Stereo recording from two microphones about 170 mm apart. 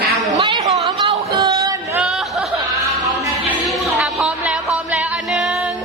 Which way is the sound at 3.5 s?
Centre (ahead or behind).